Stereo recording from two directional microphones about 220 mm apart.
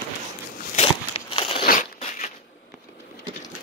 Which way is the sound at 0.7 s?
25° left (ahead or behind).